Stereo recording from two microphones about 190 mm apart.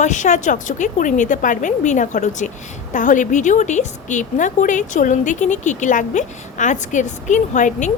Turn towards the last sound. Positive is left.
turn(degrees=40)  # may be behind; listen again after turning